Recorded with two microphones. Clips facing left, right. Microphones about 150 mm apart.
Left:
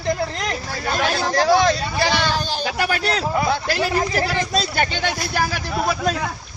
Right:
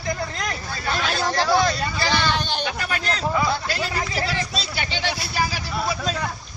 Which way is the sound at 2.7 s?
70° left (ahead or behind).